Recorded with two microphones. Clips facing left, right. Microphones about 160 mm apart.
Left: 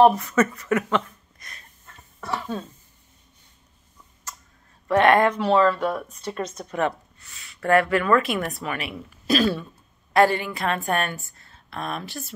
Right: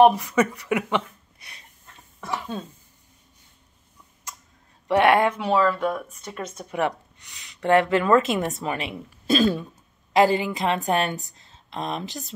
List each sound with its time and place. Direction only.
0.0 s speech: 10° right (ahead or behind)
4.8 s a woman's voice: 10° right (ahead or behind)